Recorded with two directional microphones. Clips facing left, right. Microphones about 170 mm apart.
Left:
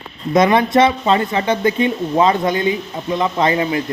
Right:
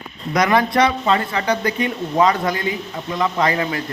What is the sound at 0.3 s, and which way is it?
Speech, 25° left (ahead or behind).